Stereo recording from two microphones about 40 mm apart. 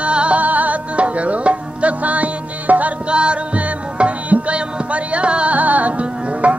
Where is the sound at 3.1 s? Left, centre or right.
Right.